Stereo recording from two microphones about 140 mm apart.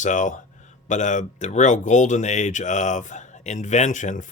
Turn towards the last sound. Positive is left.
turn(degrees=65)  # may be behind; listen again after turning